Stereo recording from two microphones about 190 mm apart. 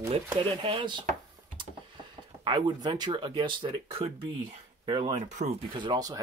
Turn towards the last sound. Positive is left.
turn(degrees=-20)  # may be behind; listen again after turning